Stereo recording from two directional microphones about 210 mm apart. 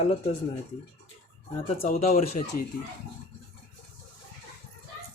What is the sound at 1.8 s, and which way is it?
Speech, 30° left (ahead or behind).